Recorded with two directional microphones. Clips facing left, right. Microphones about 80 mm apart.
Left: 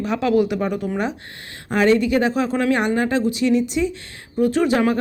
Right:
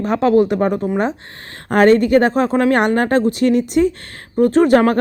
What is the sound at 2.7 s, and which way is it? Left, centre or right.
Speech, right.